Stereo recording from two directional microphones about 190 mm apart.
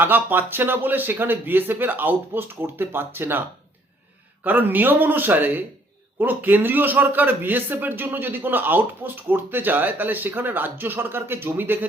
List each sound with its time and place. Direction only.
0.0 s a man's voice: 10° right (ahead or behind)
4.4 s a man's voice: 10° right (ahead or behind)